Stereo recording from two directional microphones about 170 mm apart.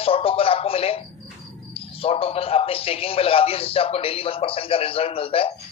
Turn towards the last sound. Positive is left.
turn(degrees=35)  # may be behind; listen again after turning